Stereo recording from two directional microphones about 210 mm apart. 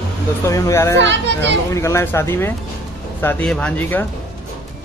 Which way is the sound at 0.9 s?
55° right (ahead or behind).